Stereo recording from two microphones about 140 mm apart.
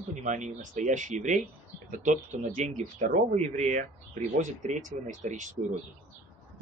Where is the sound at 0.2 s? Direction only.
60° right (ahead or behind).